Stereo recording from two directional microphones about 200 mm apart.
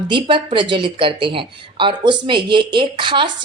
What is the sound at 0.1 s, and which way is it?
Speech, 25° right (ahead or behind).